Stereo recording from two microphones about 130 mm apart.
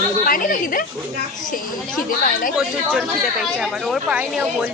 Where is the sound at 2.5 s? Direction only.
10° right (ahead or behind).